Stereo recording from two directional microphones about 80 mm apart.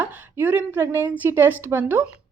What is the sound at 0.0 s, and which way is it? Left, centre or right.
Speech, right.